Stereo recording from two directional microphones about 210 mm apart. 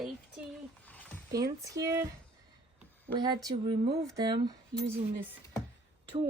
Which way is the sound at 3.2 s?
20° right (ahead or behind).